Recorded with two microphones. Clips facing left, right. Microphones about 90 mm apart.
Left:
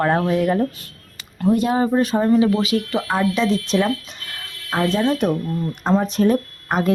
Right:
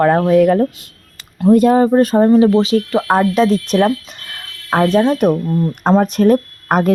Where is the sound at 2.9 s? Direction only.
45° right (ahead or behind).